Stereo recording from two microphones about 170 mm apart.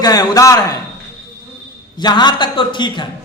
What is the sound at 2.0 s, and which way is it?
A man's voice, 25° left (ahead or behind).